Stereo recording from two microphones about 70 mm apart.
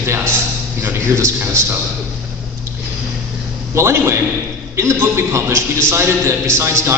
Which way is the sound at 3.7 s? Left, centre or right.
Right.